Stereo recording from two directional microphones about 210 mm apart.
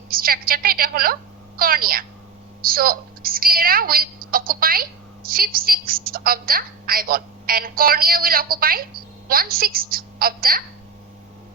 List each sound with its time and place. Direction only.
0.1 s a woman's voice: 45° right (ahead or behind)